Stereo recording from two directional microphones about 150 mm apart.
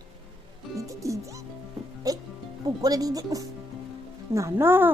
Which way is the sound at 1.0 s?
20° right (ahead or behind).